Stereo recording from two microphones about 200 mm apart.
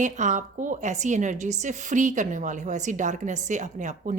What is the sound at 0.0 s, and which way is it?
Speech, 40° right (ahead or behind).